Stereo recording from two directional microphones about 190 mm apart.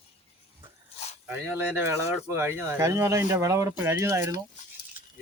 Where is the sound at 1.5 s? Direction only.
10° right (ahead or behind).